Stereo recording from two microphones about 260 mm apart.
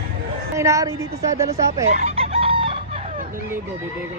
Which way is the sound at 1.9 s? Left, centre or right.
Right.